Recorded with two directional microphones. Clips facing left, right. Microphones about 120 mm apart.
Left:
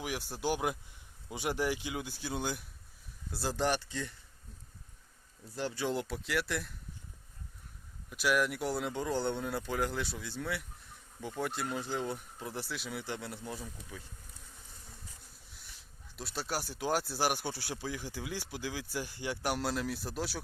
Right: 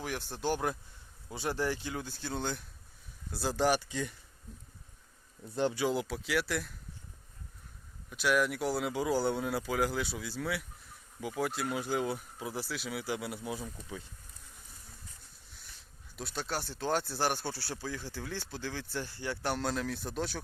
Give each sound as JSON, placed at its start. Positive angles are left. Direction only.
{"t": 0.0, "sound": "speech", "side_deg": 10}
{"t": 3.3, "sound": "speech", "side_deg": 0}
{"t": 3.8, "sound": "speech", "side_deg": -15}
{"t": 5.5, "sound": "speech", "side_deg": -20}
{"t": 5.8, "sound": "speech", "side_deg": 0}
{"t": 8.1, "sound": "speech", "side_deg": 0}
{"t": 16.1, "sound": "speech", "side_deg": 0}